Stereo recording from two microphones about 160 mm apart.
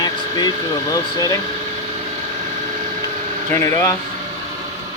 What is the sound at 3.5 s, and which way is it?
Speech, 15° left (ahead or behind).